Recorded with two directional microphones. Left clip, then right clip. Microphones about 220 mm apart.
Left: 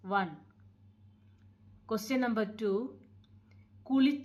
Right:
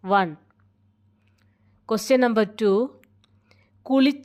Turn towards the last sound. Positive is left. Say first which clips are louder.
# right 9 dB
turn(degrees=-45)  # may be behind; listen again after turning